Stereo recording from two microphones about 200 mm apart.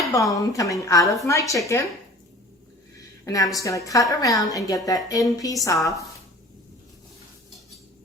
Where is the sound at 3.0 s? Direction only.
15° left (ahead or behind).